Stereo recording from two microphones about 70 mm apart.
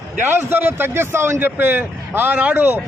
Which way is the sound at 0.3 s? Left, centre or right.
Right.